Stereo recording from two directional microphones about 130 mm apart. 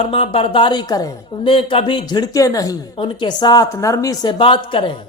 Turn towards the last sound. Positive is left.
turn(degrees=40)  # may be behind; listen again after turning